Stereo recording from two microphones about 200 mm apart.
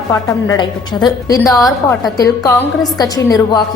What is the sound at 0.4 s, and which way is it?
A woman's voice, 20° left (ahead or behind).